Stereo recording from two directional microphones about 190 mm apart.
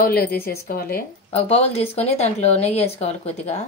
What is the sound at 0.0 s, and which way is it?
Speech, 55° left (ahead or behind).